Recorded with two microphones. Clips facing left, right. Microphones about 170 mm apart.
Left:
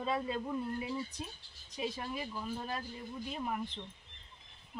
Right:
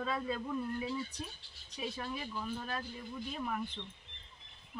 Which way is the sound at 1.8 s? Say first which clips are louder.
Left 2 dB; 25° left (ahead or behind).